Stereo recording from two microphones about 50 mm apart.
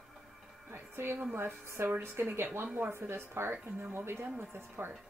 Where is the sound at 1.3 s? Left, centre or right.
Right.